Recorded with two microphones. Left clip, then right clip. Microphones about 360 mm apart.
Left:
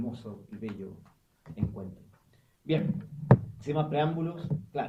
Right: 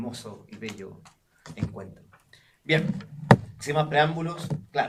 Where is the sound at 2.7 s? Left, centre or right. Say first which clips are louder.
Right 6 dB; right.